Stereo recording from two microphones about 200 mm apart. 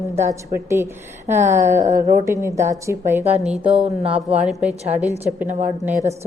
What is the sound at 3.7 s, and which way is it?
Speech, 30° right (ahead or behind).